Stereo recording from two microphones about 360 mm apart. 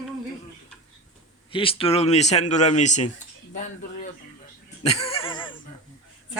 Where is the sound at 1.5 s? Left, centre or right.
Centre.